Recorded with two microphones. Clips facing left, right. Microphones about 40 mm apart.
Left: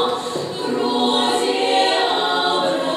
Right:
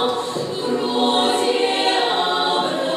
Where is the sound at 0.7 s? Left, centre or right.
Centre.